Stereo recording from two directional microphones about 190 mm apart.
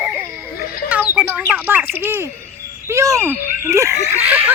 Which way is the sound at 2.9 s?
15° right (ahead or behind).